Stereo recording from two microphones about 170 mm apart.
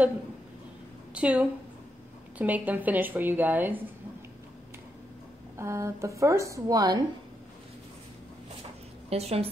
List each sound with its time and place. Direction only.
1.1 s a woman's voice: 5° right (ahead or behind)
5.6 s a woman's voice: 15° right (ahead or behind)
9.1 s a woman's voice: 35° right (ahead or behind)